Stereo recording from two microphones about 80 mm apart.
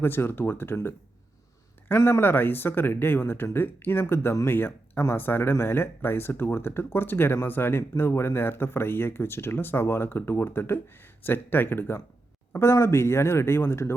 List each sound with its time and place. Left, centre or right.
0.0 s speech: left